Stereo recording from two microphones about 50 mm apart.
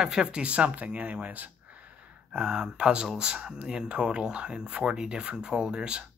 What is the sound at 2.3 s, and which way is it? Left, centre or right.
Speech, centre.